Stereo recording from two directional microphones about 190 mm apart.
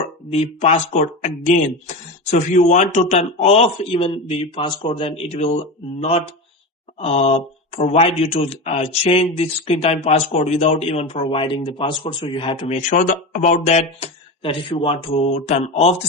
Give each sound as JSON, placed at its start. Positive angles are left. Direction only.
{"t": 0.3, "sound": "speech", "side_deg": 35}